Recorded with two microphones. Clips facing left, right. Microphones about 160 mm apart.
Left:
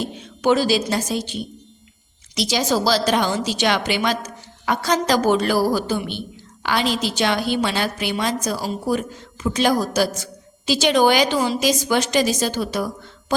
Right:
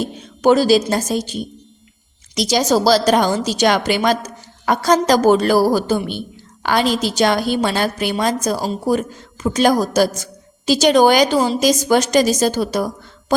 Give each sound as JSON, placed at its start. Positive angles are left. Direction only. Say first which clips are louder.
{"t": 0.0, "sound": "a woman's voice", "louder": "right 5 dB", "side_deg": -40}